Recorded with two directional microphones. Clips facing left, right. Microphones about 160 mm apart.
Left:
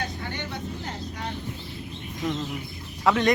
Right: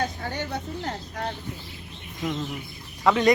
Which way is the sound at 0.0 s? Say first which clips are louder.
Right 4 dB; 45° right (ahead or behind).